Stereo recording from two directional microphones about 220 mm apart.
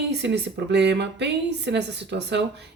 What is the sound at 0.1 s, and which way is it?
Speech, 50° right (ahead or behind).